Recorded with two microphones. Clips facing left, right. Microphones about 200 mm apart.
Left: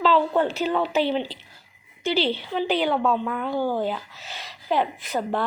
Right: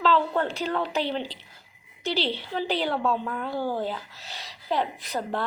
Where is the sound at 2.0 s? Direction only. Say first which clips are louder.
Left 4 dB; centre (ahead or behind).